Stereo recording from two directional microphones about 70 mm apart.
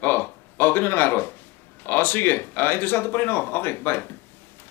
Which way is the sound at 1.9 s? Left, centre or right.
Left.